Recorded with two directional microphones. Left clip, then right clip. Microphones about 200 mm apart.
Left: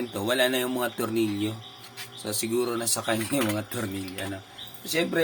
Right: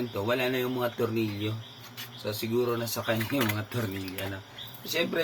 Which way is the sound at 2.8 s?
65° left (ahead or behind).